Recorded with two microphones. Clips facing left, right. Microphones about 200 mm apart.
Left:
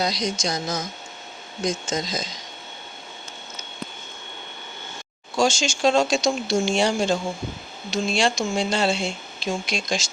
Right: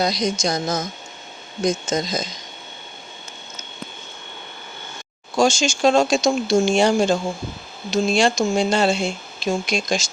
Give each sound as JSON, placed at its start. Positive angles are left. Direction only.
{"t": 0.0, "sound": "speech", "side_deg": -50}
{"t": 5.4, "sound": "speech", "side_deg": -45}